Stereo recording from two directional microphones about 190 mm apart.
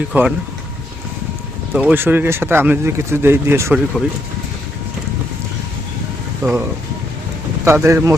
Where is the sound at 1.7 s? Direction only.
10° right (ahead or behind).